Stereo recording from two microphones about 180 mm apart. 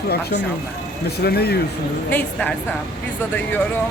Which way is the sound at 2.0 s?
5° left (ahead or behind).